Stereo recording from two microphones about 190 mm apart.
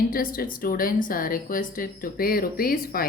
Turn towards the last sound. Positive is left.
turn(degrees=50)  # may be behind; listen again after turning